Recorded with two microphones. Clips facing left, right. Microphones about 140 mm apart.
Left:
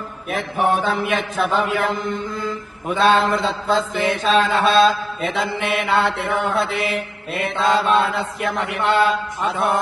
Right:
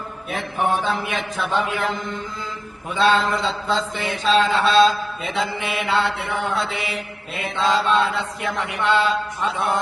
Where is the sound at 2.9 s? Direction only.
55° left (ahead or behind).